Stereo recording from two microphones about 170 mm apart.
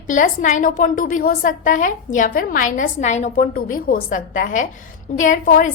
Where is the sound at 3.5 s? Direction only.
55° left (ahead or behind).